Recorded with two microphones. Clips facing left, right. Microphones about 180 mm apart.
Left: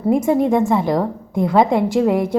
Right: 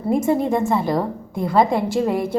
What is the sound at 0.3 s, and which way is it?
A woman's voice, 15° left (ahead or behind).